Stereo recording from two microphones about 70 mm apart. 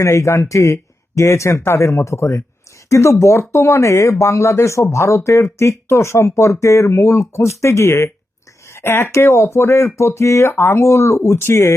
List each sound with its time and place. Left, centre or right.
0.0 s speech: left
8.7 s speech: left